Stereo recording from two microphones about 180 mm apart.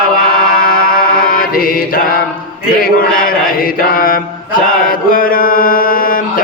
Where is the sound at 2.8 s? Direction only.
50° left (ahead or behind).